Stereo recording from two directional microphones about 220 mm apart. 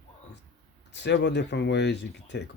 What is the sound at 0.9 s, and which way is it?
Speech, 50° left (ahead or behind).